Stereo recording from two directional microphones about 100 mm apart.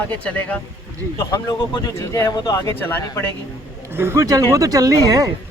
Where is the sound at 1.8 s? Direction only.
35° left (ahead or behind).